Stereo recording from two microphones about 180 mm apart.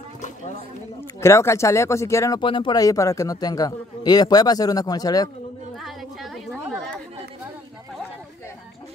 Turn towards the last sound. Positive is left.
turn(degrees=5)  # may be behind; listen again after turning